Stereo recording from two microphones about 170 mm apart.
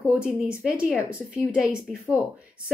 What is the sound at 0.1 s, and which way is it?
A woman's voice, 5° right (ahead or behind).